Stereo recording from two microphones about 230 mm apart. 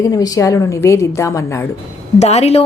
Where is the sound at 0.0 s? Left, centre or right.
Centre.